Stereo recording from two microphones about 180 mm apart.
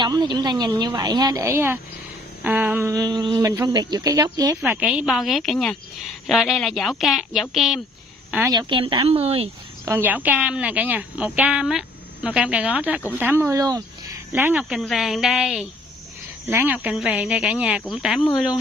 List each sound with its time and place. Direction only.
0.0 s a woman's voice: 25° right (ahead or behind)
4.6 s a woman's voice: 5° right (ahead or behind)
8.5 s speech: 25° right (ahead or behind)
9.8 s a woman's voice: 10° right (ahead or behind)
14.3 s a woman's voice: 5° right (ahead or behind)